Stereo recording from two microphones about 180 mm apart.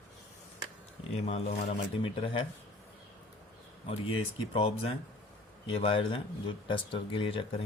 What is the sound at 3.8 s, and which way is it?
Speech, 30° left (ahead or behind).